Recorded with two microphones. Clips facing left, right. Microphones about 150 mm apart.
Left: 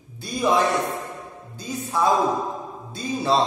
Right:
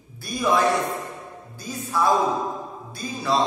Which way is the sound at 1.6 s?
20° left (ahead or behind).